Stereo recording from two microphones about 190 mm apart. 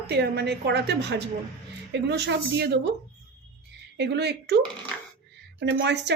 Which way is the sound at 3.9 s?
60° right (ahead or behind).